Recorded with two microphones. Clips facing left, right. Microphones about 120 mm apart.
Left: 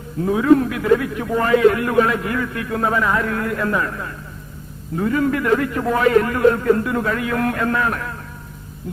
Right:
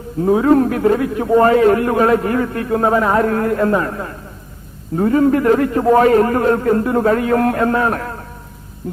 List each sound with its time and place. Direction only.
0.2 s a man's voice: 35° right (ahead or behind)